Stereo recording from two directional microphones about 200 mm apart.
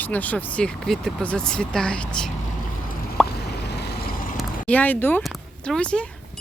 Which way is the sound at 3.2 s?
55° left (ahead or behind).